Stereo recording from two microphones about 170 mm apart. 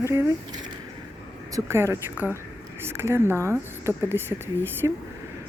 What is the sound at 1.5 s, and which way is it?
Speech, 15° right (ahead or behind).